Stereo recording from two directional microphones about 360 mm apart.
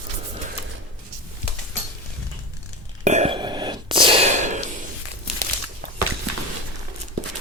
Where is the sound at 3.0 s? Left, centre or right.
Centre.